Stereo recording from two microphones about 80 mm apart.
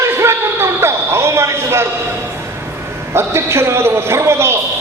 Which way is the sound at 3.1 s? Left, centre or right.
Right.